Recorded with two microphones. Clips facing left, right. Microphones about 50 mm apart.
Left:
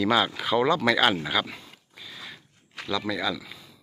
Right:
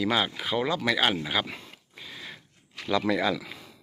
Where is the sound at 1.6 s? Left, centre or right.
Right.